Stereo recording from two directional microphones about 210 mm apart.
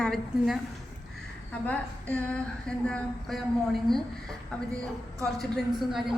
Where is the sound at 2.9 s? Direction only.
5° left (ahead or behind).